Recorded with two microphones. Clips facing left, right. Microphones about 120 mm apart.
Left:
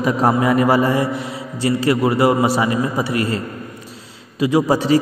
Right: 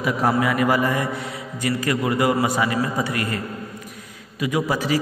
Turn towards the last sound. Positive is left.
turn(degrees=30)  # may be behind; listen again after turning